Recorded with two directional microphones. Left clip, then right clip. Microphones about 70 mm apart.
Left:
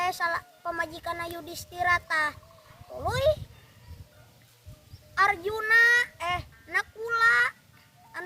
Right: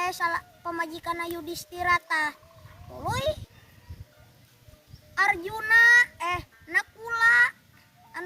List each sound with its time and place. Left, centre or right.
0.0 s a child's voice: left
5.1 s speech: left